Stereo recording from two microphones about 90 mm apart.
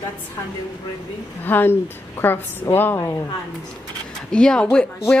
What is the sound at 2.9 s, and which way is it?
Speech, 40° left (ahead or behind).